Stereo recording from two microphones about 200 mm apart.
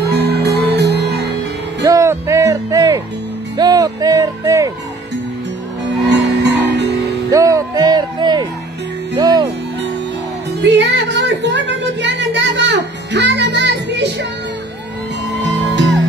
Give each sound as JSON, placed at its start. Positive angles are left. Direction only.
{"t": 0.1, "sound": "music", "side_deg": -55}
{"t": 1.8, "sound": "music", "side_deg": -15}
{"t": 6.0, "sound": "music", "side_deg": -60}
{"t": 7.2, "sound": "a sound", "side_deg": -15}
{"t": 9.2, "sound": "music", "side_deg": -20}
{"t": 10.6, "sound": "music", "side_deg": -60}
{"t": 15.2, "sound": "music", "side_deg": -60}